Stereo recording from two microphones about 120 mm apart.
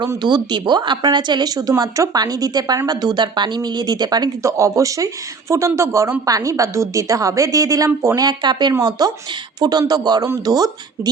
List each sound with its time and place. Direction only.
0.0 s a woman's voice: 35° right (ahead or behind)